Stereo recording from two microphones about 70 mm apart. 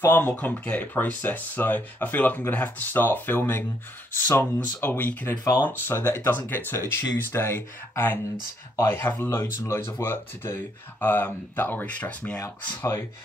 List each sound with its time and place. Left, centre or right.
0.0 s speech: left
9.6 s speech: left; by 12.4 s centre